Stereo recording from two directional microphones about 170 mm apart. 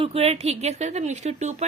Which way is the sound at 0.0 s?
35° right (ahead or behind).